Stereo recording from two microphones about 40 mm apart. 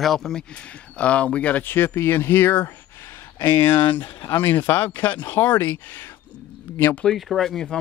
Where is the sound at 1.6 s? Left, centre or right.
Left.